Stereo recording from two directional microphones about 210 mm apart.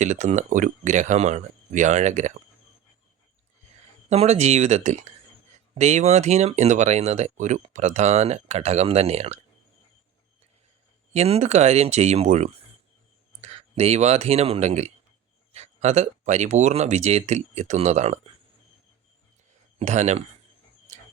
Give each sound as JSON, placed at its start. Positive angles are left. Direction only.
{"t": 0.0, "sound": "speech", "side_deg": -35}
{"t": 4.1, "sound": "speech", "side_deg": -30}
{"t": 11.1, "sound": "speech", "side_deg": -30}
{"t": 19.8, "sound": "speech", "side_deg": -35}